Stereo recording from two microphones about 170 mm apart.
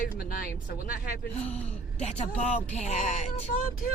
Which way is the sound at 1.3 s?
40° left (ahead or behind).